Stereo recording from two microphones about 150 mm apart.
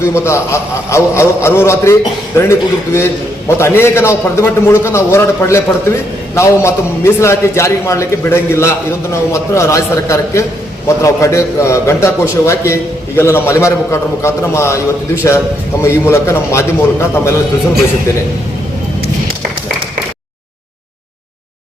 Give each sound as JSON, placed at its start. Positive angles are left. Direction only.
{"t": 0.0, "sound": "a man's voice", "side_deg": 20}